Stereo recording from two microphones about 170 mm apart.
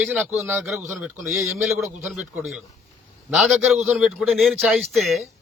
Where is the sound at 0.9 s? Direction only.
15° right (ahead or behind).